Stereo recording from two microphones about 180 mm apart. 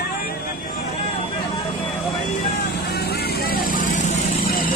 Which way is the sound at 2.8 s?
60° left (ahead or behind).